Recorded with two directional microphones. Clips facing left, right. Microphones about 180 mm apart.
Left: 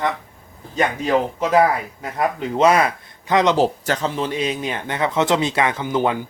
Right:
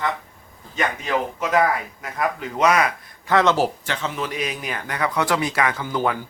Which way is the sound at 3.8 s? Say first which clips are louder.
Left 5 dB; 40° left (ahead or behind).